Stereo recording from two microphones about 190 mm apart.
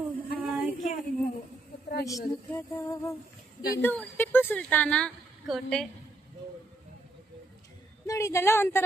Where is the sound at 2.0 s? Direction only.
15° left (ahead or behind).